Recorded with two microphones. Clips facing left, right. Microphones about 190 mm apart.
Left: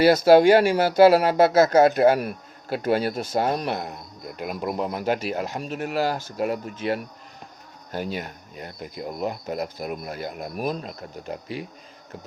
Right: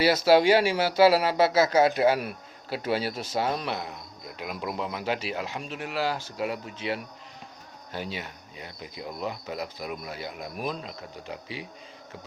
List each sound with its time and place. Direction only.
0.0 s speech: 50° left (ahead or behind)